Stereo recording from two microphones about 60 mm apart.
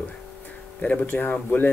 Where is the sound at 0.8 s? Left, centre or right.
Left.